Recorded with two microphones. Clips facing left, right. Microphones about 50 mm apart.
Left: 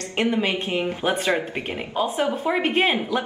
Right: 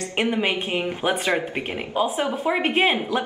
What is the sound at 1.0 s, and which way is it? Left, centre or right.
A woman's voice, centre.